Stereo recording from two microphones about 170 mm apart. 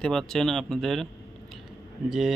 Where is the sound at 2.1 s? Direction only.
Centre (ahead or behind).